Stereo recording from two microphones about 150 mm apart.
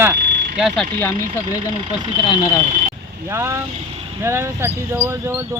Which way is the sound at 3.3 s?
15° right (ahead or behind).